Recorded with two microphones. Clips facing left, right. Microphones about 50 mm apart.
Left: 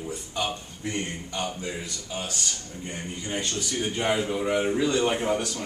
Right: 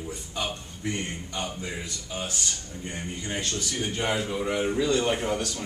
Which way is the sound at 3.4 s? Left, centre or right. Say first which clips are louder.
Left 2 dB; centre.